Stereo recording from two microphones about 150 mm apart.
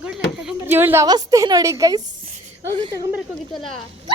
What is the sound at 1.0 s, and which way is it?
Speech, 25° right (ahead or behind).